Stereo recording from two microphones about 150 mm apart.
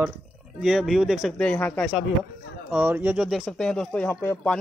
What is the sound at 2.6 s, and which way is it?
Speech, 10° right (ahead or behind).